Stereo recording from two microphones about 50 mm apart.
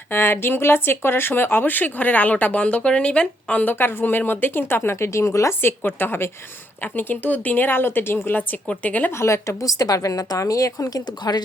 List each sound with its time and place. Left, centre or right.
0.1 s speech: left
5.6 s speech: left
6.8 s a woman's voice: left
8.6 s a woman's voice: left
9.1 s a woman's voice: left